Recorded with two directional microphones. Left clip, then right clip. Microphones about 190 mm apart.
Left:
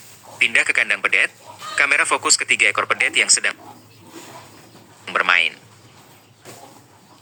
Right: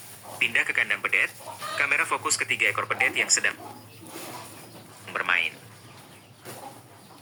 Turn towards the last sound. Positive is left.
turn(degrees=35)  # may be behind; listen again after turning